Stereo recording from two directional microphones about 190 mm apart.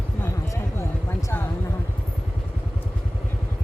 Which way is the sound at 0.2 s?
15° left (ahead or behind).